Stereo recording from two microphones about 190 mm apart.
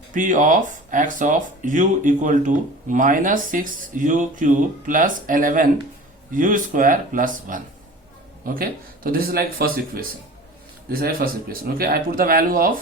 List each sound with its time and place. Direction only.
0.1 s speech: 40° right (ahead or behind)